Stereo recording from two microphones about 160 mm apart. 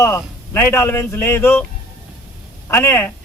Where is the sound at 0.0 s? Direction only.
15° left (ahead or behind).